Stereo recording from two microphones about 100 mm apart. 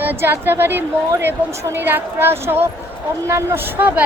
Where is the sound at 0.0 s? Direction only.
20° right (ahead or behind).